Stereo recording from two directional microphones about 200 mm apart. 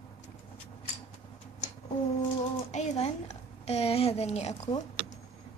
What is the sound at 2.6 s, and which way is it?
A woman's voice, 35° left (ahead or behind).